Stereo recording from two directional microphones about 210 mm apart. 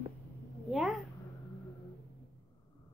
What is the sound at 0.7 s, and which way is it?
Cat, centre (ahead or behind).